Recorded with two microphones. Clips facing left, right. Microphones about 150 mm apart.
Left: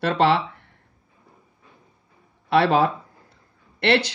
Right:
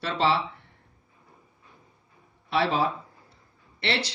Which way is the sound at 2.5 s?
65° left (ahead or behind).